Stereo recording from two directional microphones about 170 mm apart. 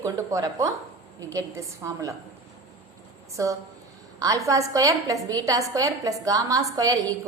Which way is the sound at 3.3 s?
20° right (ahead or behind).